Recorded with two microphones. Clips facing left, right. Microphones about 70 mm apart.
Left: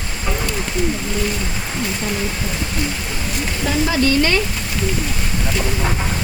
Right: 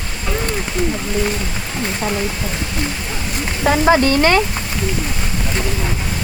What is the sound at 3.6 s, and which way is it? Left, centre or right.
Speech, right.